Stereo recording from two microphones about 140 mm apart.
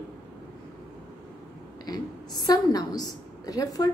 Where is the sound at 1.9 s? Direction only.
30° left (ahead or behind).